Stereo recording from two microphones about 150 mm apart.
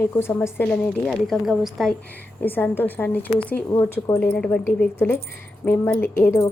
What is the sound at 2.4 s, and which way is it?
A woman's voice, 10° left (ahead or behind).